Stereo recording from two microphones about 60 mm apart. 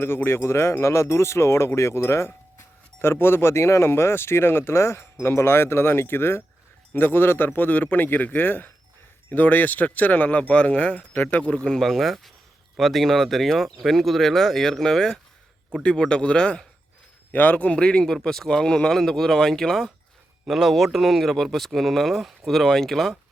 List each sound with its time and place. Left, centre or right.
0.0 s speech: left
11.5 s speech: centre
11.8 s speech: centre